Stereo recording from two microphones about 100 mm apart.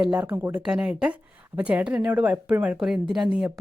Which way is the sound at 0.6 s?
10° right (ahead or behind).